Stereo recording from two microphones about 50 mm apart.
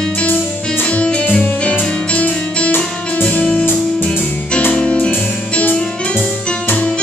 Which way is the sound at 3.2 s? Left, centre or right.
Left.